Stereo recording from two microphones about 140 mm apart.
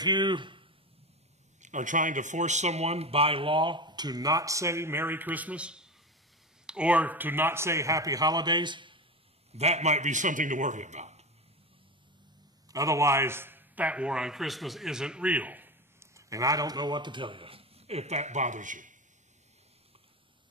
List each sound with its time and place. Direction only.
0.0 s speech: 30° right (ahead or behind)
1.6 s a man's voice: 60° right (ahead or behind); by 9.0 s 35° right (ahead or behind)
9.5 s a man's voice: 50° right (ahead or behind)
12.7 s a man's voice: 25° right (ahead or behind); by 18.9 s 65° right (ahead or behind)